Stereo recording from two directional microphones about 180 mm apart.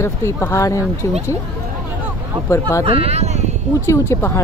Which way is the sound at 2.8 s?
30° right (ahead or behind).